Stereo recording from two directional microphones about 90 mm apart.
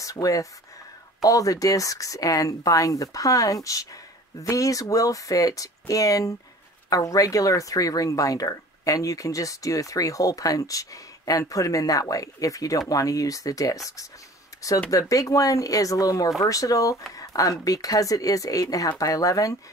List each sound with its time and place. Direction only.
0.0 s speech: 40° left (ahead or behind)
14.9 s speech: 40° left (ahead or behind)